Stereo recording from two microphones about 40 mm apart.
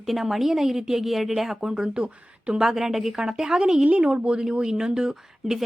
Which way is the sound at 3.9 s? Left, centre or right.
Right.